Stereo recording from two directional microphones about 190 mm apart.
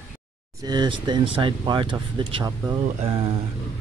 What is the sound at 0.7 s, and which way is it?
Speech, 20° right (ahead or behind).